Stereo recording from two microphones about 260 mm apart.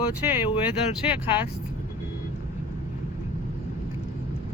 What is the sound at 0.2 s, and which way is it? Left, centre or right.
Speech, centre.